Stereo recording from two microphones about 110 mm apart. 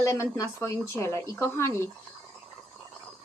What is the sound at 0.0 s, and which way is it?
Speech, 25° left (ahead or behind).